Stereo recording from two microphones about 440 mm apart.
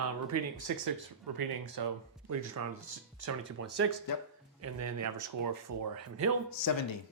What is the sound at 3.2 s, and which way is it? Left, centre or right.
Speech, right.